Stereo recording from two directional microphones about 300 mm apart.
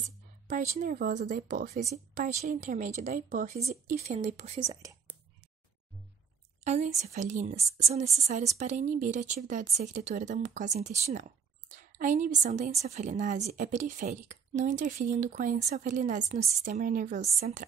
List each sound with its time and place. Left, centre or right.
0.5 s a woman's voice: right
6.6 s a woman's voice: right